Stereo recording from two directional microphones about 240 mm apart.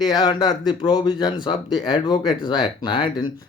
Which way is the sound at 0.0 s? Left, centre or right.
Centre.